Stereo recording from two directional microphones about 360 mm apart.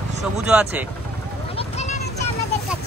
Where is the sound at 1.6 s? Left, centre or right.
Centre.